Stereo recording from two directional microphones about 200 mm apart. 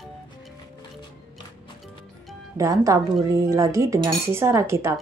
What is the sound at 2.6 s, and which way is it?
Speech, 15° right (ahead or behind).